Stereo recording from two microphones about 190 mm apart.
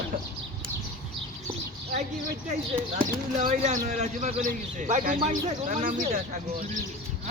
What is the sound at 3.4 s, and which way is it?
Speech, 40° right (ahead or behind).